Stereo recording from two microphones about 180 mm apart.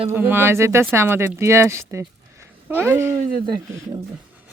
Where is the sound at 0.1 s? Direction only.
10° right (ahead or behind).